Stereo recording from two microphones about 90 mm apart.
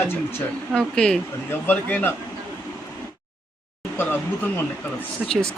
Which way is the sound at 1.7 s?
20° left (ahead or behind).